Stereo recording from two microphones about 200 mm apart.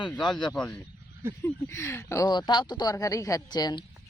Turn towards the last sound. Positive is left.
turn(degrees=20)  # may be behind; listen again after turning